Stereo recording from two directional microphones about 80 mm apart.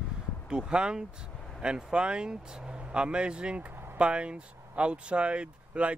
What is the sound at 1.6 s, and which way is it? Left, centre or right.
Speech, centre.